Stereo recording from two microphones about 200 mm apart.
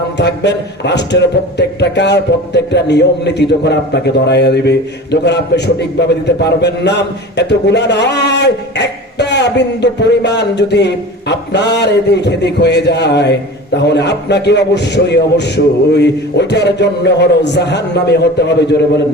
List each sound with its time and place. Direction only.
0.2 s a man's voice: 60° left (ahead or behind)